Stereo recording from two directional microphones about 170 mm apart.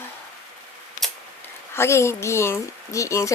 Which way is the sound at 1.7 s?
15° left (ahead or behind).